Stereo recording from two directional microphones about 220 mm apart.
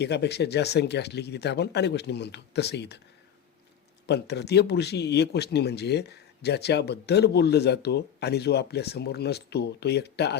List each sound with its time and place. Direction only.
0.0 s speech: 50° left (ahead or behind)
4.0 s speech: 50° left (ahead or behind)